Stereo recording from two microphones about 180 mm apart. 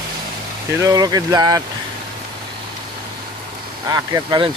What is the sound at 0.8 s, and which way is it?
Speech, 20° right (ahead or behind).